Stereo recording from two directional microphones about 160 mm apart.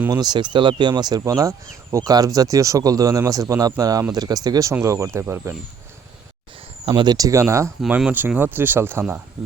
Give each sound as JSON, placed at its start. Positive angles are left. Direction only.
{"t": 0.1, "sound": "speech", "side_deg": -25}
{"t": 6.8, "sound": "speech", "side_deg": -30}
{"t": 7.8, "sound": "speech", "side_deg": -5}